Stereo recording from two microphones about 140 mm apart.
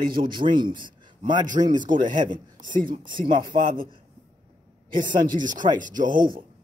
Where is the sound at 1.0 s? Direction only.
30° right (ahead or behind).